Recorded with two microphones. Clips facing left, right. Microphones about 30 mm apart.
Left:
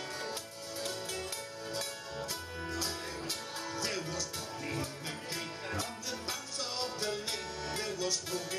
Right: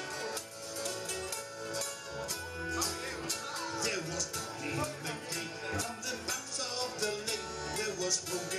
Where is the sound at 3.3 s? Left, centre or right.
Left.